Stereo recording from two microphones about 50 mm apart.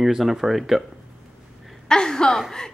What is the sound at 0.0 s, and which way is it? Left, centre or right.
Speech, centre.